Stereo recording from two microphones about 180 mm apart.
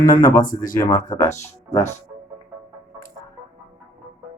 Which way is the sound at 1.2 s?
40° left (ahead or behind).